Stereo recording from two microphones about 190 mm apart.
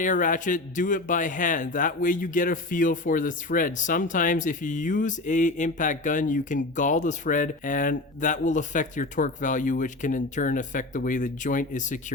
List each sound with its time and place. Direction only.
0.0 s a man's voice: 45° left (ahead or behind)